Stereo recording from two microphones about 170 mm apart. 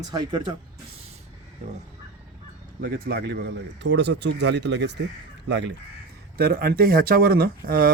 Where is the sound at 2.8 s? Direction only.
70° right (ahead or behind); by 5.7 s 90° right.